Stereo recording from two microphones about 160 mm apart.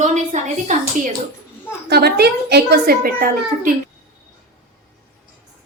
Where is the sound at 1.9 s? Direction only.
85° right; by 3.7 s 65° right (ahead or behind).